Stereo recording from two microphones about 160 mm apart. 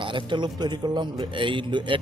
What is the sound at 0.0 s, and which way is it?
Speech, 30° right (ahead or behind).